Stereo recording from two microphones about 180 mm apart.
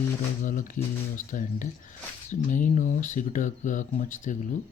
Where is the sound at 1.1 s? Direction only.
45° left (ahead or behind).